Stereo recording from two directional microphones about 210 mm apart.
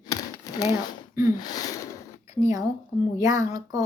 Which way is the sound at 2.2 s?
30° left (ahead or behind).